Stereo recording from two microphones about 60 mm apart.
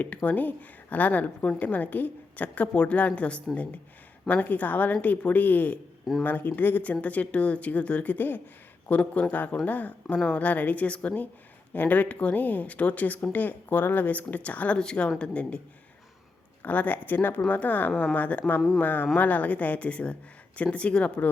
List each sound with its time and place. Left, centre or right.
0.0 s a woman's voice: left
10.2 s a woman's voice: centre
10.4 s a woman's voice: left
16.6 s a woman's voice: left